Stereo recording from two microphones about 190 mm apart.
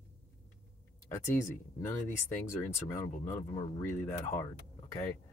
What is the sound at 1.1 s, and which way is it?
Speech, 15° left (ahead or behind).